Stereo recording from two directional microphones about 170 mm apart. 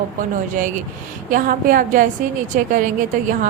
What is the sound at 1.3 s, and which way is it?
A woman's voice, 55° right (ahead or behind).